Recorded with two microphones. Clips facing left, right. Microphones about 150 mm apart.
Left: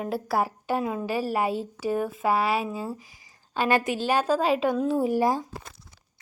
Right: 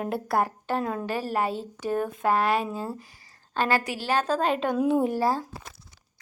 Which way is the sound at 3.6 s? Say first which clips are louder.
Left 2 dB; 20° left (ahead or behind).